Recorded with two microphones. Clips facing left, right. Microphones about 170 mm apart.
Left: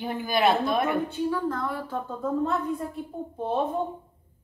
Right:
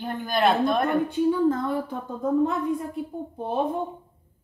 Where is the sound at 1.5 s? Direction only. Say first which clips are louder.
Right 6 dB; 20° right (ahead or behind).